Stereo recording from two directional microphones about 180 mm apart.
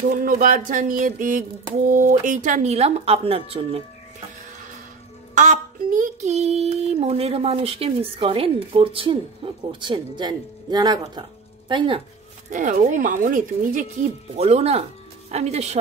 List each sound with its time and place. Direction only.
0.1 s speech: 50° right (ahead or behind)
1.9 s child singing: 50° right (ahead or behind); by 3.8 s 30° right (ahead or behind)
5.3 s child singing: 45° right (ahead or behind); by 11.2 s 25° right (ahead or behind)
11.7 s speech: 30° right (ahead or behind)
12.4 s speech: 45° right (ahead or behind)
14.3 s child singing: 35° right (ahead or behind)